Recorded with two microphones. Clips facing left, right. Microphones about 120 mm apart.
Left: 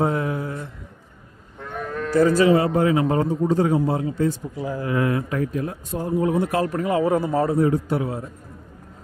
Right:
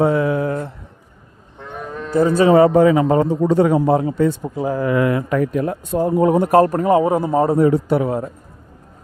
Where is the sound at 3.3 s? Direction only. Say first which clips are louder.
Right 5 dB; 80° right.